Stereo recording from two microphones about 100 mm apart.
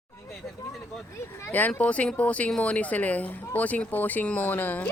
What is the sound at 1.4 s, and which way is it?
Speech, 20° left (ahead or behind).